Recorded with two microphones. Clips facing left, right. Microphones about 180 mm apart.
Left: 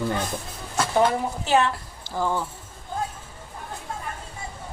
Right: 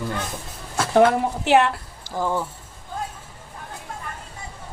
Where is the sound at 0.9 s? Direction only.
70° right (ahead or behind).